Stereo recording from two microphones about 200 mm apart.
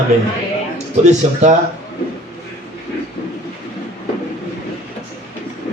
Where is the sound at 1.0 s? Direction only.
35° right (ahead or behind).